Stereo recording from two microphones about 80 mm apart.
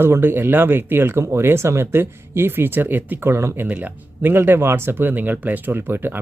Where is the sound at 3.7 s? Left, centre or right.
Right.